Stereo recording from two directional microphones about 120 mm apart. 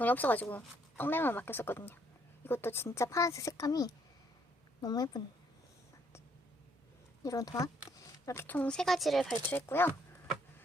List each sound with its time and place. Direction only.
0.0 s a woman's voice: 15° left (ahead or behind); by 5.2 s 30° left (ahead or behind)
7.2 s speech: 30° left (ahead or behind); by 9.4 s centre (ahead or behind)
9.5 s speech: 20° left (ahead or behind)